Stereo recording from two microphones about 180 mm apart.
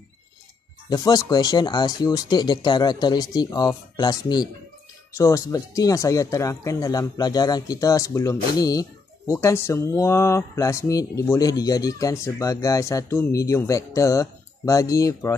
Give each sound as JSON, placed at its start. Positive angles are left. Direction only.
{"t": 0.8, "sound": "speech", "side_deg": 20}